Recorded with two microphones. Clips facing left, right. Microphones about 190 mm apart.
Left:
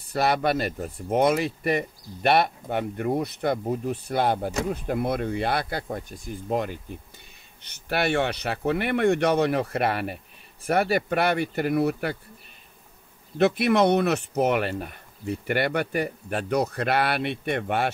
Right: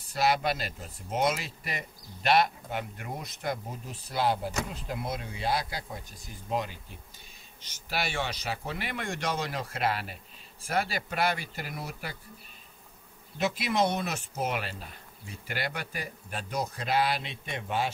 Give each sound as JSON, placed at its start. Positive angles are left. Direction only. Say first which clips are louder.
{"t": 0.0, "sound": "speech", "louder": "left 4 dB", "side_deg": 60}
{"t": 13.4, "sound": "speech", "louder": "left 8 dB", "side_deg": 60}